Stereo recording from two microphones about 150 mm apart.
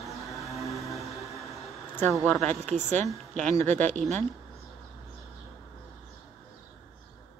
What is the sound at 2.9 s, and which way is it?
Speech, 20° left (ahead or behind).